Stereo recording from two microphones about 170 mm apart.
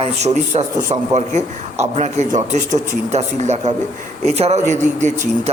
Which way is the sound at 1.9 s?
40° right (ahead or behind).